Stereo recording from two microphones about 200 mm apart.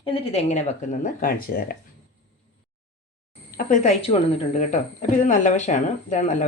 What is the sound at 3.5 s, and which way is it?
Speech, 35° left (ahead or behind).